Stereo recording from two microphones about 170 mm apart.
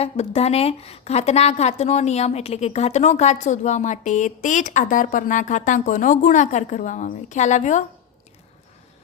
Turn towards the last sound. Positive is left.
turn(degrees=45)  # may be behind; listen again after turning